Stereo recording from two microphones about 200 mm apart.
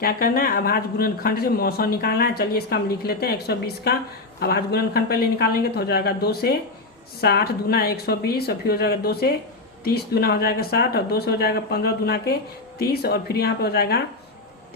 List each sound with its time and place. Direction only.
0.0 s speech: 45° left (ahead or behind)